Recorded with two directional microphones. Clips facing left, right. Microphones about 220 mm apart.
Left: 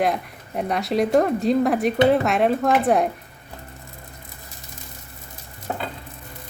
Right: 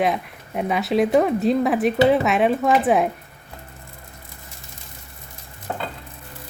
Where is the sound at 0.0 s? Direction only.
Centre (ahead or behind).